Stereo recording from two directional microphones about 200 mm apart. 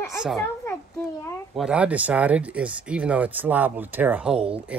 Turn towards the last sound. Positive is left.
turn(degrees=-5)  # may be behind; listen again after turning